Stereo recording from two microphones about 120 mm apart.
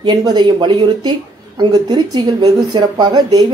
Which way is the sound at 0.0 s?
35° right (ahead or behind).